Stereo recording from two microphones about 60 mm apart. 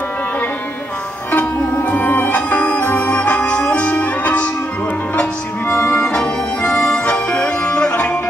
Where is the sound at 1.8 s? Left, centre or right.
Left.